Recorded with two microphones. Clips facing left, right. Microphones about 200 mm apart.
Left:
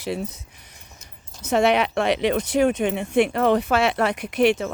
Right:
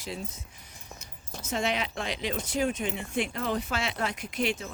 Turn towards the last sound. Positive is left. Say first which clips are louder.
# left 11 dB
turn(degrees=70)  # may be behind; listen again after turning